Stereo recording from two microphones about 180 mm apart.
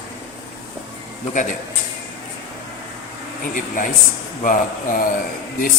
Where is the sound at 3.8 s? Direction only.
45° left (ahead or behind).